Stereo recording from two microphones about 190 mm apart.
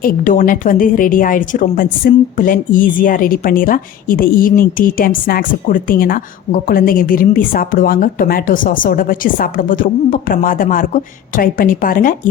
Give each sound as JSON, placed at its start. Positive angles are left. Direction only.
{"t": 0.0, "sound": "a woman's voice", "side_deg": 45}